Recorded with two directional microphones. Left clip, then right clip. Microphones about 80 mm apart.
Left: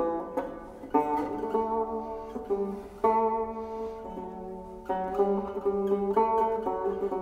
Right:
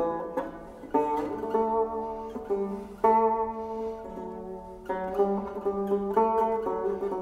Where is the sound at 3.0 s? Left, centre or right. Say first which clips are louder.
Right 3 dB; right.